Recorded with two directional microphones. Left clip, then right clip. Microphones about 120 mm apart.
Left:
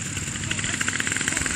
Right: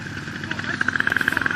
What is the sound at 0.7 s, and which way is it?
Vehicle, 55° left (ahead or behind).